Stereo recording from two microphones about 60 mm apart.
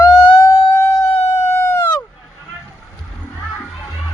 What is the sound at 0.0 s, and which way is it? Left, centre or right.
Siren, left.